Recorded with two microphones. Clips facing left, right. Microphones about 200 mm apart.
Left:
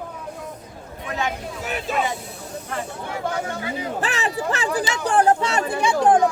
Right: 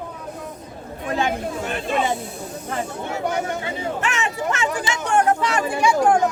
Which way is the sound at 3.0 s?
25° right (ahead or behind).